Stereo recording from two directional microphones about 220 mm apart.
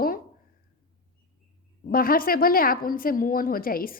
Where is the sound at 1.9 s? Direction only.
40° left (ahead or behind).